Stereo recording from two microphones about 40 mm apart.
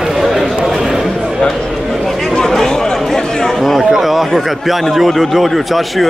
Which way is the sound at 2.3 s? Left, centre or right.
Centre.